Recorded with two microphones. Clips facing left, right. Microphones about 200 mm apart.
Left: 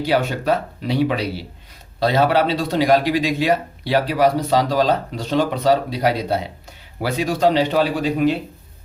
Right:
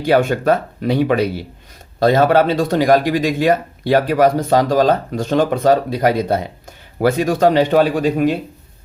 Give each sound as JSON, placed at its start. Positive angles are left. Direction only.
{"t": 0.0, "sound": "speech", "side_deg": -50}